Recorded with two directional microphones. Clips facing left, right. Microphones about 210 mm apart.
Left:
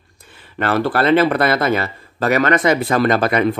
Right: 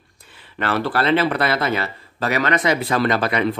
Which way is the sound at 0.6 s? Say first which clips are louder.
Left 4 dB; 45° left (ahead or behind).